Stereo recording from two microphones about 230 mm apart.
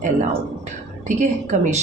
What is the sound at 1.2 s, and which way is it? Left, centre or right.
Speech, right.